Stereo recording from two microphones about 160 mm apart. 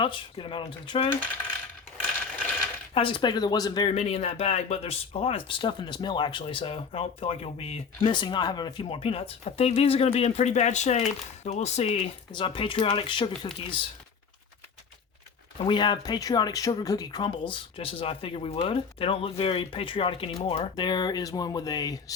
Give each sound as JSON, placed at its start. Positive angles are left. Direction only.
{"t": 0.0, "sound": "speech", "side_deg": 30}
{"t": 2.9, "sound": "speech", "side_deg": 30}
{"t": 3.9, "sound": "speech", "side_deg": 45}
{"t": 15.5, "sound": "speech", "side_deg": 30}